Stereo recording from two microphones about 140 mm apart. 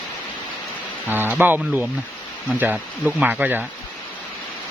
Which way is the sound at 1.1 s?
15° right (ahead or behind).